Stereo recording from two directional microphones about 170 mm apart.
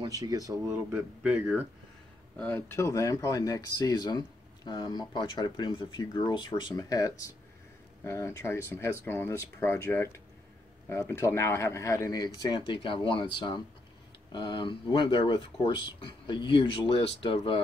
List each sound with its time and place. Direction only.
0.0 s speech: 20° right (ahead or behind)
0.9 s speech: 10° right (ahead or behind)
2.3 s speech: 10° left (ahead or behind); by 17.6 s 30° left (ahead or behind)